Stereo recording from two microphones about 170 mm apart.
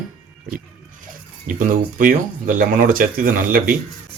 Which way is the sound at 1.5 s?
50° right (ahead or behind).